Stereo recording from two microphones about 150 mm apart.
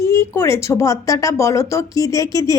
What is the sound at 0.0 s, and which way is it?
A woman's voice, 20° left (ahead or behind).